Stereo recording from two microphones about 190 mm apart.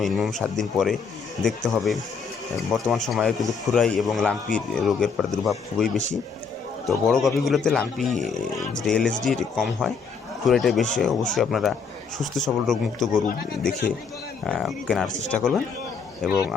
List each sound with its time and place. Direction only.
0.0 s a man's voice: centre (ahead or behind)
14.4 s a man's voice: centre (ahead or behind)